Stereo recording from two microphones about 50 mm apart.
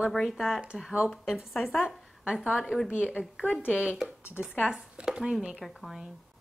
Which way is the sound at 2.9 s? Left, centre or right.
Left.